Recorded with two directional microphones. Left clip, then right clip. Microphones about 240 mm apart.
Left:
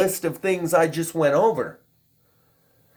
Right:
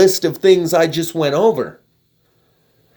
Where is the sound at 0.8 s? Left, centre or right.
Right.